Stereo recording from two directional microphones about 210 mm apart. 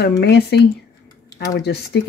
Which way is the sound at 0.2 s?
50° left (ahead or behind).